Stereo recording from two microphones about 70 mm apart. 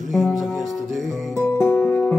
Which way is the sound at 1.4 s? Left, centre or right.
Left.